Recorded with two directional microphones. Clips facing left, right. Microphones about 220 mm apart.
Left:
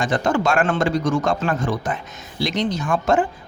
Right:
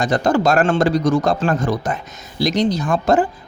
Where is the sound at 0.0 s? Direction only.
35° right (ahead or behind).